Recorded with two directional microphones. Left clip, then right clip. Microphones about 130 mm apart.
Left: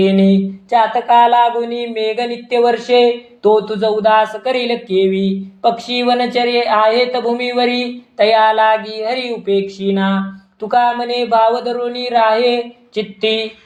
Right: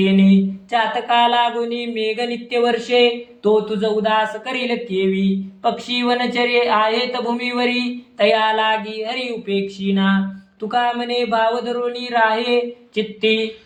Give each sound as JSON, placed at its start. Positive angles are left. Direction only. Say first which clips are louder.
{"t": 0.7, "sound": "speech", "louder": "left 6 dB", "side_deg": 25}
{"t": 8.3, "sound": "speech", "louder": "left 6 dB", "side_deg": 35}